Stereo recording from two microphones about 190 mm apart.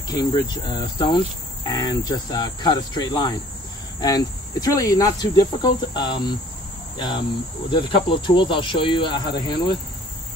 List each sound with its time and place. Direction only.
0.1 s cricket: 20° left (ahead or behind)
7.7 s cricket: 25° left (ahead or behind)